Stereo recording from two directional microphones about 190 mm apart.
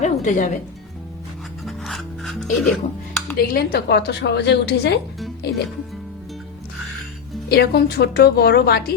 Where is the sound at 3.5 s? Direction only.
60° left (ahead or behind).